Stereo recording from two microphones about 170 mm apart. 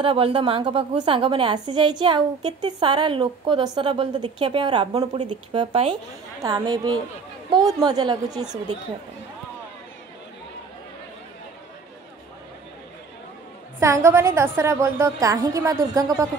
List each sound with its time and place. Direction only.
0.0 s a woman's voice: 35° right (ahead or behind)
13.7 s a woman's voice: 15° right (ahead or behind)